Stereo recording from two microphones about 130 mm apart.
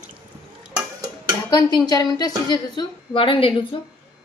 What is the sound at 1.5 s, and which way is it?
A woman's voice, 30° left (ahead or behind).